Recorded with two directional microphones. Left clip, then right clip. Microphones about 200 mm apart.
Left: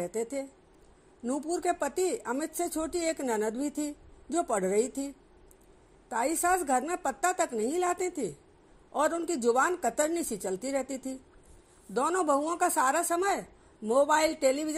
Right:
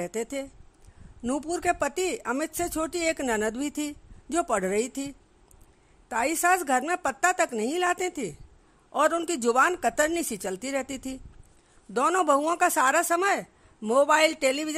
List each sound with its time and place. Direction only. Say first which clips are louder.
0.0 s speech: right 2 dB; 25° right (ahead or behind)